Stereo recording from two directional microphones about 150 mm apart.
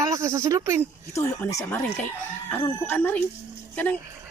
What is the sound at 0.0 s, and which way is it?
Speech, 20° right (ahead or behind).